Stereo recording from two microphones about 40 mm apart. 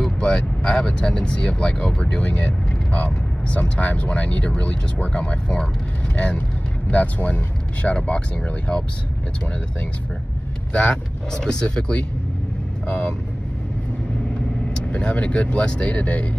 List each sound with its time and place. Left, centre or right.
0.2 s speech: left
10.7 s speech: left
11.6 s speech: left
14.9 s speech: left
15.9 s speech: left